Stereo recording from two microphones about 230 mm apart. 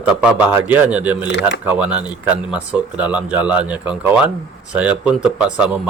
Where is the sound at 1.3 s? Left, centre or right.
Left.